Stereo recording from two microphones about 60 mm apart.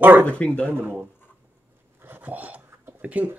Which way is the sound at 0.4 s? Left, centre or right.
Left.